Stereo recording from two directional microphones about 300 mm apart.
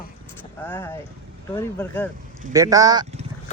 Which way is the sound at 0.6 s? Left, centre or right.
Centre.